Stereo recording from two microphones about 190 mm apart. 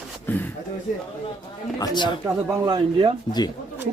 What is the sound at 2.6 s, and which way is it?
Speech, 25° right (ahead or behind).